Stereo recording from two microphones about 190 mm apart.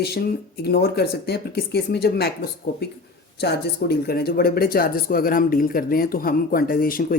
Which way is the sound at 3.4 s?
55° left (ahead or behind).